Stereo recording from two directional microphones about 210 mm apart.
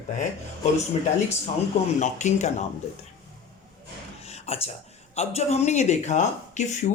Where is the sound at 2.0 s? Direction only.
35° left (ahead or behind).